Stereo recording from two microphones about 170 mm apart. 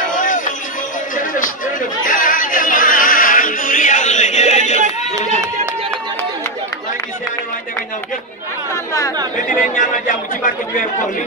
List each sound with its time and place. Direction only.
0.1 s a sound: 50° left (ahead or behind)
1.1 s music: 50° left (ahead or behind)
9.5 s speech: 50° left (ahead or behind)